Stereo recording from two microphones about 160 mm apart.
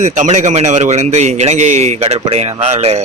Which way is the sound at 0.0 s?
45° right (ahead or behind).